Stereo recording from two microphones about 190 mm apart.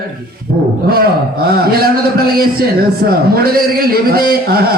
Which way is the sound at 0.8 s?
55° right (ahead or behind).